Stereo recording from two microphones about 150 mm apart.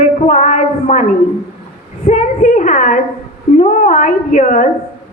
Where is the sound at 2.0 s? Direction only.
55° left (ahead or behind).